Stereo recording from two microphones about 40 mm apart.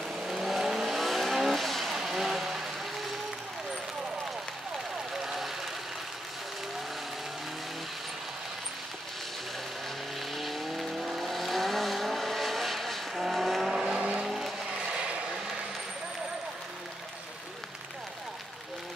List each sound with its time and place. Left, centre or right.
0.1 s vehicle: centre
2.0 s vehicle: centre
5.1 s a sound: centre
10.3 s vehicle: centre
13.7 s vehicle: centre
13.9 s vehicle: right